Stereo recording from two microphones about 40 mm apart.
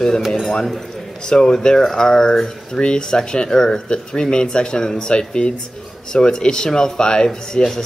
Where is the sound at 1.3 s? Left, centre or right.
Centre.